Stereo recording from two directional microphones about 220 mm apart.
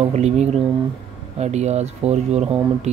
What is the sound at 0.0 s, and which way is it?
Speech, 30° right (ahead or behind).